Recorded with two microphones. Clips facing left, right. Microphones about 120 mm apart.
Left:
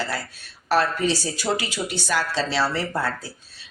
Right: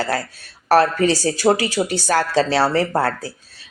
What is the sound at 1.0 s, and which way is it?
Speech, 90° right.